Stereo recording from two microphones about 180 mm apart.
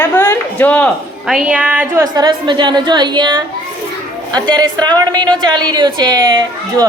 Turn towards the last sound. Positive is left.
turn(degrees=-25)  # may be behind; listen again after turning